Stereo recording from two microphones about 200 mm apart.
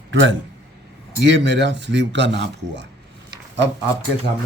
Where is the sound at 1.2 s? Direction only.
60° right (ahead or behind).